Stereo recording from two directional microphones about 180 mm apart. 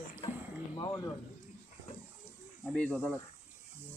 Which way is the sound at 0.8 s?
25° left (ahead or behind).